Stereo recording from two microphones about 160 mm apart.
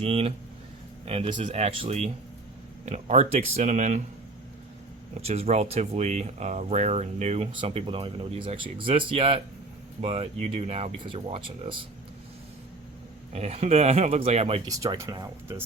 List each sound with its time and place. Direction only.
0.0 s speech: 35° right (ahead or behind)
5.2 s speech: 40° right (ahead or behind)
13.3 s speech: 40° right (ahead or behind)
14.7 s speech: 20° right (ahead or behind)